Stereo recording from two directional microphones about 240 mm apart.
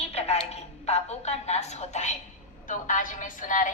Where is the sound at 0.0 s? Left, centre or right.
Left.